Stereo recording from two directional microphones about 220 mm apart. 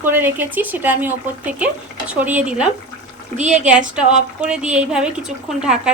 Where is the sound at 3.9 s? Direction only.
5° right (ahead or behind).